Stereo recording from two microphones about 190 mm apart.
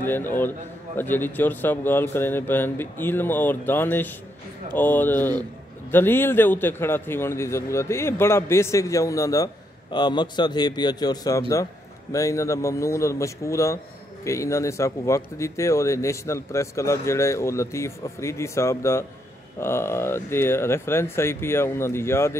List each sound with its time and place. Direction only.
0.0 s a man's voice: 10° left (ahead or behind)